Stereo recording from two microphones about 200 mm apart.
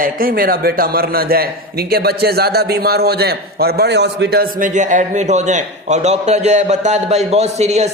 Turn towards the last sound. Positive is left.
turn(degrees=-35)  # may be behind; listen again after turning